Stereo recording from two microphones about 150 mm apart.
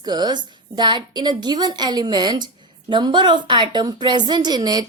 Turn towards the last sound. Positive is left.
turn(degrees=-25)  # may be behind; listen again after turning